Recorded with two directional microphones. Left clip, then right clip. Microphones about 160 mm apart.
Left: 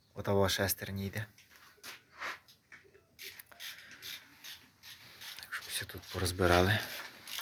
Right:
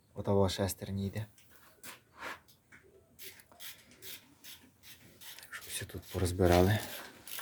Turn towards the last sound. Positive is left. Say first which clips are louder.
# even
turn(degrees=-15)  # may be behind; listen again after turning